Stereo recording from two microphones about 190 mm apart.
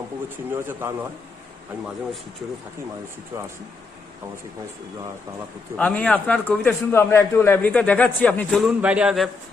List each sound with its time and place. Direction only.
0.5 s a man's voice: 10° right (ahead or behind)
3.3 s a man's voice: 15° right (ahead or behind)
5.7 s a man's voice: 5° left (ahead or behind)